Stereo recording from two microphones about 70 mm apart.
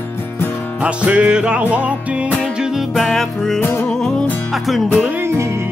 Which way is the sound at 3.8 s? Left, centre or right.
Centre.